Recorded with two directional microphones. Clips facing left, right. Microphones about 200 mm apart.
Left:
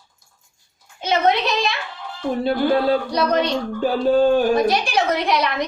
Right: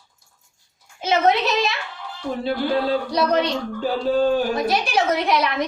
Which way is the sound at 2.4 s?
50° left (ahead or behind).